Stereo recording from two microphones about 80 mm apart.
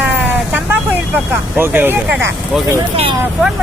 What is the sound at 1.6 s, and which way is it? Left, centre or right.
Speech, right.